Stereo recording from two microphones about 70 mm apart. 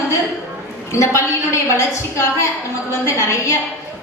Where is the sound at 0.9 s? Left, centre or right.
Left.